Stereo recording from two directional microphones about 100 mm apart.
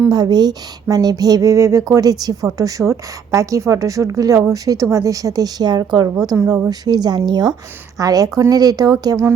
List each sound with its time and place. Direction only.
0.1 s speech: 45° right (ahead or behind)
7.9 s speech: 35° right (ahead or behind)